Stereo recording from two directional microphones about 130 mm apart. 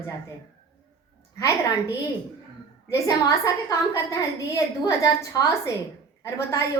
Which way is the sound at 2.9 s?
25° left (ahead or behind).